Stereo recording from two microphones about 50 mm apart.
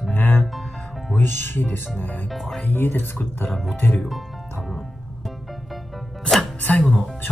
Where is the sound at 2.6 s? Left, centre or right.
Left.